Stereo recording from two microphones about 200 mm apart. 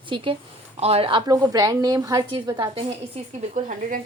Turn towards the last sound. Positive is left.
turn(degrees=-40)  # may be behind; listen again after turning